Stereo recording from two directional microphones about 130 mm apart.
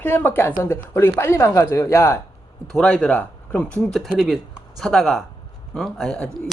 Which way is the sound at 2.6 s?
5° left (ahead or behind).